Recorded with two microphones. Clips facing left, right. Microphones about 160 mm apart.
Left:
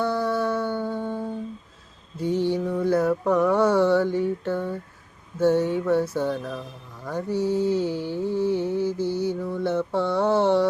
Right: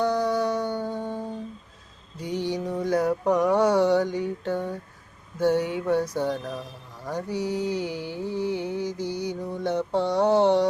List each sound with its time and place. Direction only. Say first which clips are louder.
0.0 s music: even; 15° right (ahead or behind)
2.1 s mantra: left 5 dB; 15° right (ahead or behind)